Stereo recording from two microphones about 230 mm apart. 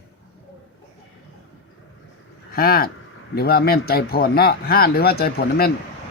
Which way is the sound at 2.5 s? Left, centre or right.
Left.